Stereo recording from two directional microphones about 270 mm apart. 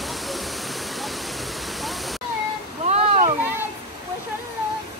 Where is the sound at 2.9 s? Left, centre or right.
Right.